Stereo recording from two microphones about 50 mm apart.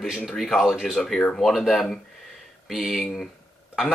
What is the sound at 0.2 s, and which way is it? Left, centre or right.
Speech, centre.